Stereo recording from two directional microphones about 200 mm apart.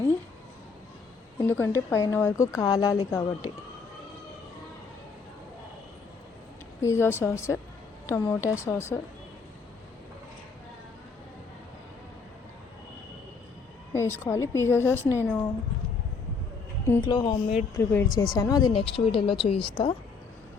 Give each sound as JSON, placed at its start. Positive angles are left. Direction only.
{"t": 1.4, "sound": "speech", "side_deg": 10}
{"t": 6.8, "sound": "speech", "side_deg": 10}
{"t": 13.9, "sound": "speech", "side_deg": 15}
{"t": 16.8, "sound": "speech", "side_deg": 15}